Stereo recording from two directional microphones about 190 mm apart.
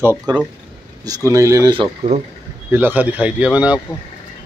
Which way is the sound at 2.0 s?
30° right (ahead or behind).